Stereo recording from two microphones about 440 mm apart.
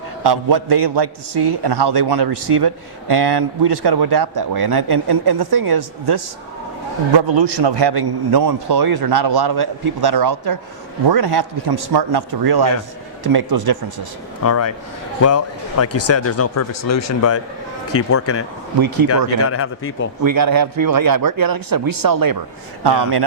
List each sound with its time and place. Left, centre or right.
0.2 s a man's voice: right
7.2 s a man's voice: right
14.4 s speech: left
20.2 s speech: right
22.8 s a man's voice: right